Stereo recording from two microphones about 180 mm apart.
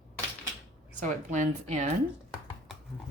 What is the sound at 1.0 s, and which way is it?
Speech, 45° right (ahead or behind).